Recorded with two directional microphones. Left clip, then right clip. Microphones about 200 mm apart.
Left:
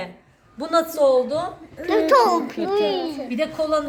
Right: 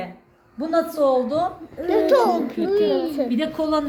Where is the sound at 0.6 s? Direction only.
25° left (ahead or behind).